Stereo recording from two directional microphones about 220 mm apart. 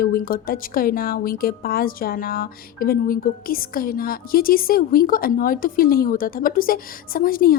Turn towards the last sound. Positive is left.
turn(degrees=40)  # may be behind; listen again after turning